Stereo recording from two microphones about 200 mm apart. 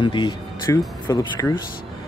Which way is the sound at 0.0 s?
25° left (ahead or behind).